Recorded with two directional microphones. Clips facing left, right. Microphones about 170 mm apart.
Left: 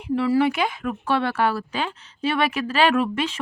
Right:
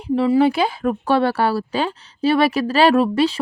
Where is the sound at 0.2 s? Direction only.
30° right (ahead or behind).